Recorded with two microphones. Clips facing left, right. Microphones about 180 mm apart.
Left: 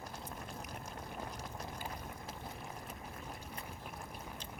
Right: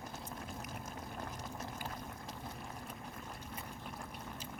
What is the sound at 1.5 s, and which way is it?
Liquid, 5° right (ahead or behind).